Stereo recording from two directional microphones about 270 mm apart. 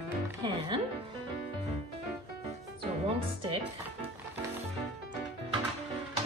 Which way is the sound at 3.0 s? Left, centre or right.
Right.